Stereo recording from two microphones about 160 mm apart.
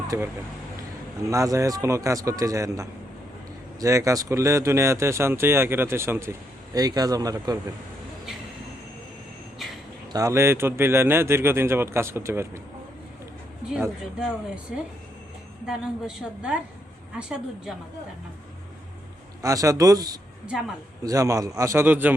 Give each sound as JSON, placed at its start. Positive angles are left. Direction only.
{"t": 0.1, "sound": "speech", "side_deg": -15}
{"t": 1.3, "sound": "a man's voice", "side_deg": -20}
{"t": 10.1, "sound": "speech", "side_deg": -20}
{"t": 13.7, "sound": "speech", "side_deg": -10}
{"t": 15.6, "sound": "a woman's voice", "side_deg": -5}
{"t": 19.4, "sound": "a man's voice", "side_deg": -20}